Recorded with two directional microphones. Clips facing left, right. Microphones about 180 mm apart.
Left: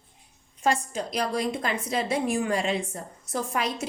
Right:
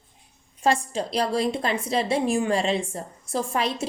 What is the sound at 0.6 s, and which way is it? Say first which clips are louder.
A woman's voice: right 3 dB; 35° right (ahead or behind).